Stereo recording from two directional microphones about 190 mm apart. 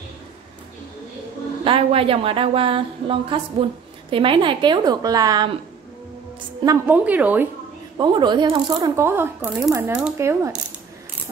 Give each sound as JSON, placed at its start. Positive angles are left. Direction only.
{"t": 1.6, "sound": "a woman's voice", "side_deg": -30}
{"t": 6.6, "sound": "speech", "side_deg": -15}
{"t": 8.0, "sound": "speech", "side_deg": -25}